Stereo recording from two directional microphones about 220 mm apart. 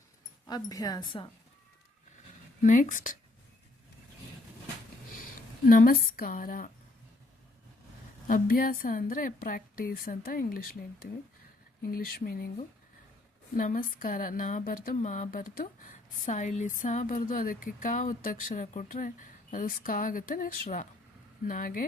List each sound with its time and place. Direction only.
0.4 s a woman's voice: 15° left (ahead or behind)
2.6 s speech: 35° left (ahead or behind)
5.6 s speech: 40° left (ahead or behind)
8.3 s speech: 40° left (ahead or behind)
11.8 s speech: 45° left (ahead or behind)